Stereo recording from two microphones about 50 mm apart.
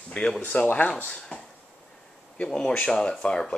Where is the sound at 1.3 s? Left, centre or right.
Left.